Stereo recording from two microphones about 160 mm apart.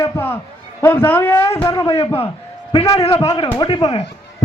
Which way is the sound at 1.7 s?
30° left (ahead or behind).